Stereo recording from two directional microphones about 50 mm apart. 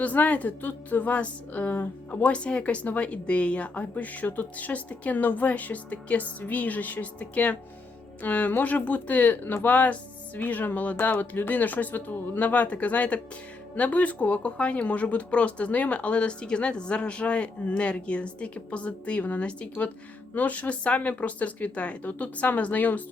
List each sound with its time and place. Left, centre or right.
0.0 s a woman's voice: left
2.3 s a woman's voice: left